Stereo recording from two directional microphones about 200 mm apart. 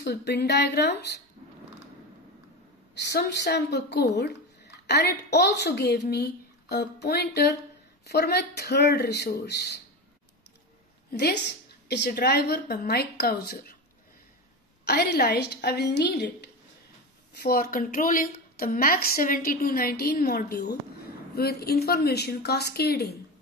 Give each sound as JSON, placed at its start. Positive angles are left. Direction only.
{"t": 0.0, "sound": "speech", "side_deg": 55}
{"t": 2.9, "sound": "a woman's voice", "side_deg": 60}
{"t": 11.1, "sound": "a woman's voice", "side_deg": 55}
{"t": 14.9, "sound": "speech", "side_deg": 50}
{"t": 17.3, "sound": "a woman's voice", "side_deg": 50}